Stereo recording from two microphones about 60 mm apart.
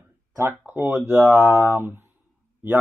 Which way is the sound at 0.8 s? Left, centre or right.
Right.